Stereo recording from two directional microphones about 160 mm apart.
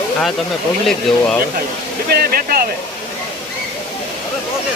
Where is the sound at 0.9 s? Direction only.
5° left (ahead or behind).